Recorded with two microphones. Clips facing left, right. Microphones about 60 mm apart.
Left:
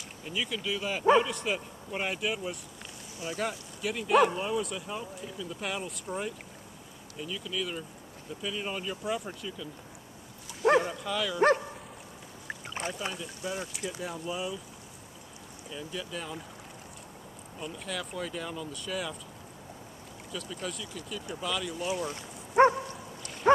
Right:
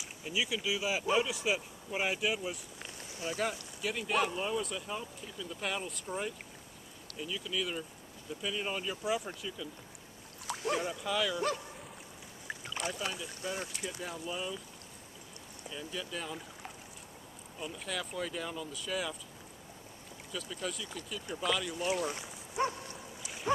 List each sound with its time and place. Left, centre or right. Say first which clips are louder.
0.2 s speech: even; centre
10.9 s speech: left 1 dB; centre
11.3 s speech: left 10 dB; left
12.6 s speech: left 2 dB; left
13.1 s speech: left 3 dB; centre
15.7 s speech: left 2 dB; centre
17.6 s speech: left 2 dB; centre
20.6 s speech: left 1 dB; centre
22.5 s dog: left 12 dB; left